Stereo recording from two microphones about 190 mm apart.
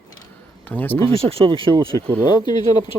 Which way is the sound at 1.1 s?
30° right (ahead or behind).